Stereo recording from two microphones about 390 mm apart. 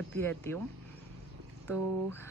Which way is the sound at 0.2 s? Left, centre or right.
Centre.